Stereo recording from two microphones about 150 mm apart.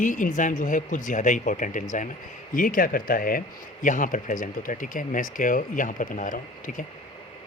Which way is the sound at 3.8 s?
60° left (ahead or behind).